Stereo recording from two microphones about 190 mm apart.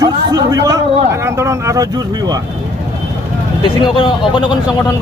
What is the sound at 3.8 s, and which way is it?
A man's voice, 25° left (ahead or behind).